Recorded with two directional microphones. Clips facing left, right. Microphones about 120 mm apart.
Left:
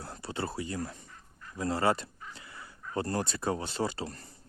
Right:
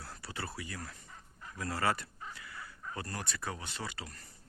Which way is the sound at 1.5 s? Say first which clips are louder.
Left 5 dB; 25° left (ahead or behind).